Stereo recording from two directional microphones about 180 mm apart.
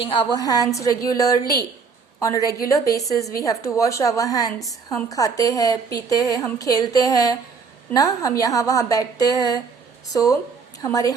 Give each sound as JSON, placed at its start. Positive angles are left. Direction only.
{"t": 0.0, "sound": "a woman's voice", "side_deg": 25}